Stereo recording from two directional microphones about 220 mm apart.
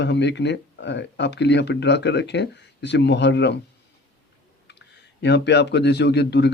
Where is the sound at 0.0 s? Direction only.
50° left (ahead or behind).